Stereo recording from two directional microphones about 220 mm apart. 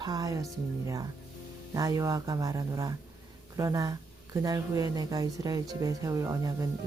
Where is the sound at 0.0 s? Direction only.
15° right (ahead or behind).